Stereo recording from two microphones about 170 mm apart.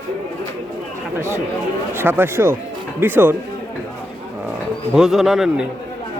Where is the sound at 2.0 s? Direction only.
10° right (ahead or behind).